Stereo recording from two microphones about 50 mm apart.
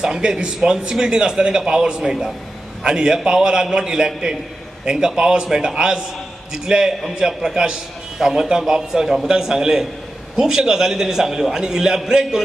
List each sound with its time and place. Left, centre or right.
0.0 s speech: centre